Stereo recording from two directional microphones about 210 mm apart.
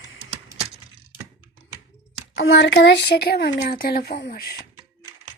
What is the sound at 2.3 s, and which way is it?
Speech, 55° left (ahead or behind).